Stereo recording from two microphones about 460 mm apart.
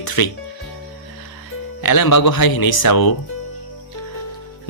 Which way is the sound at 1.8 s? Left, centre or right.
Left.